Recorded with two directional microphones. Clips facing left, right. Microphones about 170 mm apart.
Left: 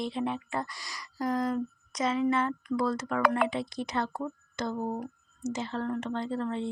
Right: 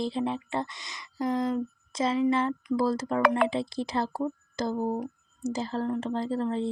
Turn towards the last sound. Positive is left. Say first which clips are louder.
# right 3 dB
turn(degrees=-35)  # may be behind; listen again after turning